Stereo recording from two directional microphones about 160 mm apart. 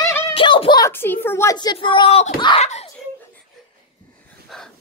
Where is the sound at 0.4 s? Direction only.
30° left (ahead or behind).